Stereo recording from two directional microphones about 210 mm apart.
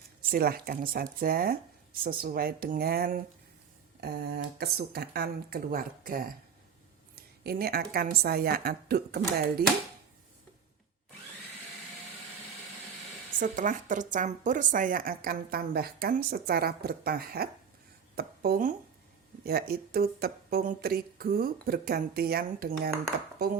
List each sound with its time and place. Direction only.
0.2 s speech: 45° right (ahead or behind)
13.4 s speech: 40° right (ahead or behind)